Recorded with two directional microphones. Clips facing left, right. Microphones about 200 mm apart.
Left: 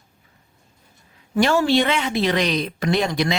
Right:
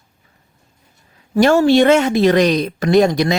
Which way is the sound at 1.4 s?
45° right (ahead or behind).